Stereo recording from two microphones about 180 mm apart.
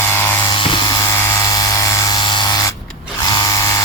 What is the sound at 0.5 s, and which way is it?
Electric toothbrush, 25° left (ahead or behind).